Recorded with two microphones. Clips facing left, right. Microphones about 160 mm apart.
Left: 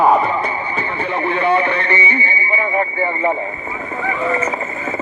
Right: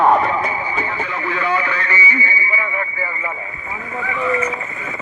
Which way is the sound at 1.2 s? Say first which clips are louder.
Left 5 dB; 25° left (ahead or behind).